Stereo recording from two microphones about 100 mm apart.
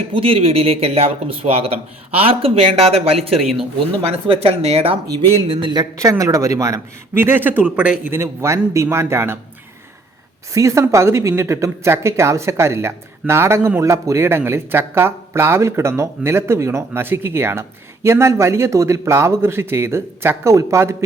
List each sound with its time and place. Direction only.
0.1 s speech: 70° right (ahead or behind)
5.5 s speech: 55° right (ahead or behind)
5.8 s speech: 35° right (ahead or behind)
10.5 s speech: 30° right (ahead or behind)